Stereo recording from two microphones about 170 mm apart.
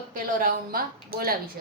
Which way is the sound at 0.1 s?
55° right (ahead or behind).